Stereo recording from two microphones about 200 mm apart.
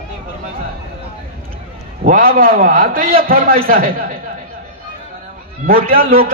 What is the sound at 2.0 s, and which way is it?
A man's voice, 45° right (ahead or behind).